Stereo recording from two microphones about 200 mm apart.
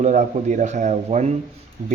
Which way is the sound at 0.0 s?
35° right (ahead or behind).